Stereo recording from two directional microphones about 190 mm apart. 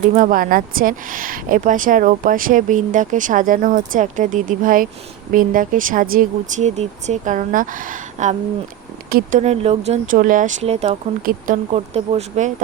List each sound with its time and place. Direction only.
0.1 s speech: 45° right (ahead or behind)
9.4 s speech: 35° right (ahead or behind)
11.3 s speech: 45° right (ahead or behind)
11.7 s speech: 35° right (ahead or behind)